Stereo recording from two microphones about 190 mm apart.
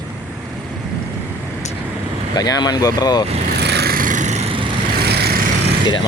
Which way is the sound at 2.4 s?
20° left (ahead or behind).